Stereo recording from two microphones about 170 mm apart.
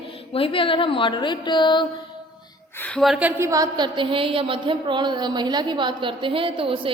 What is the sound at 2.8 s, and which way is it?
A woman's voice, 5° left (ahead or behind).